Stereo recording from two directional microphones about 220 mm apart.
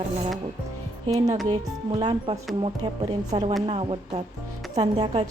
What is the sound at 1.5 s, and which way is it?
A woman's voice, 20° right (ahead or behind).